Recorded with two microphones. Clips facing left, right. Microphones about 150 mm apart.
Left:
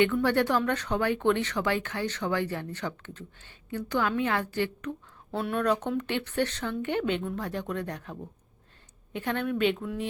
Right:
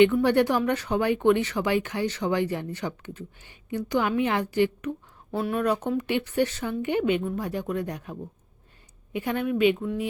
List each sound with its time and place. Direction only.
0.0 s speech: 15° right (ahead or behind)